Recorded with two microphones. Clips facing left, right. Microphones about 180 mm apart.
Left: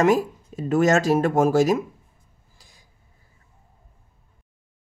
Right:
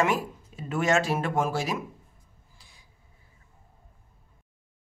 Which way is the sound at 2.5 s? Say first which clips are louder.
Left 3 dB; 40° left (ahead or behind).